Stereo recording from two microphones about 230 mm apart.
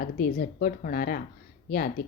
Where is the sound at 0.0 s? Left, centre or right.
Left.